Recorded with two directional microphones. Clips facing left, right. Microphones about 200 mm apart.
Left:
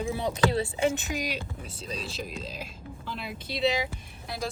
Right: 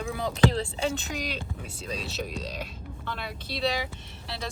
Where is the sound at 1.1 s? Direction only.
10° left (ahead or behind).